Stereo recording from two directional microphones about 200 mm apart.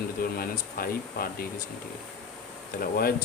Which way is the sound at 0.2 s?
45° left (ahead or behind).